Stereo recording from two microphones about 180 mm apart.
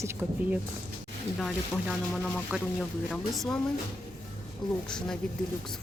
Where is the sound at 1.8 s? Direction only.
Centre (ahead or behind).